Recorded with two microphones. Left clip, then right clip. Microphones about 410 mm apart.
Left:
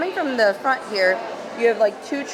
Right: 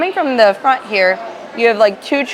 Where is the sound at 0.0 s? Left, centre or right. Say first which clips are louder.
Right 8 dB; right.